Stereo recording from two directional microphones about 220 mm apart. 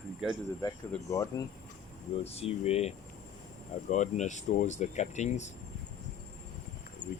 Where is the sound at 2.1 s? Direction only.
30° left (ahead or behind).